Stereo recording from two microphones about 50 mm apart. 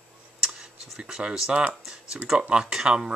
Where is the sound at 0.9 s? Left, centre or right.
Centre.